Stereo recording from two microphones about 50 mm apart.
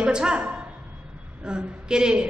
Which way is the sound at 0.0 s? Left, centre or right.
Centre.